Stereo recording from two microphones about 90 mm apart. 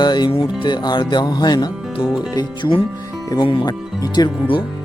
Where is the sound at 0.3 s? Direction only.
65° left (ahead or behind); by 1.7 s 50° left (ahead or behind).